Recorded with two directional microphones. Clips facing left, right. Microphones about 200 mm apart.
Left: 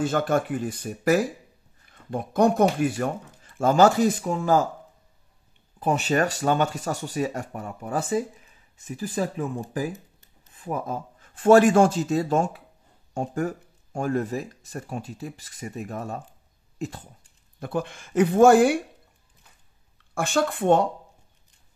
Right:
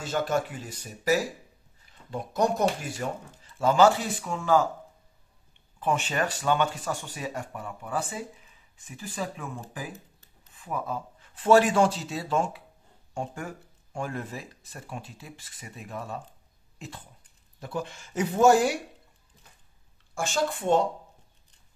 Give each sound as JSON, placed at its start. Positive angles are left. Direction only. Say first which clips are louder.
{"t": 0.0, "sound": "speech", "louder": "left 4 dB", "side_deg": 55}
{"t": 5.8, "sound": "speech", "louder": "left 5 dB", "side_deg": 40}
{"t": 10.5, "sound": "speech", "louder": "left 3 dB", "side_deg": 45}
{"t": 17.6, "sound": "speech", "louder": "left 5 dB", "side_deg": 55}
{"t": 20.2, "sound": "speech", "louder": "left 4 dB", "side_deg": 60}